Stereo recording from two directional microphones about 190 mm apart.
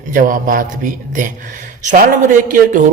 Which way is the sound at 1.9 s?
45° right (ahead or behind).